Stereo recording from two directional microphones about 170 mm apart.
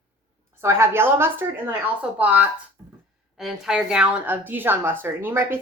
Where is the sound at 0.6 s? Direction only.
15° right (ahead or behind).